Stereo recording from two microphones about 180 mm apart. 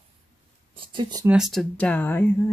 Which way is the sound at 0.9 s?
25° right (ahead or behind).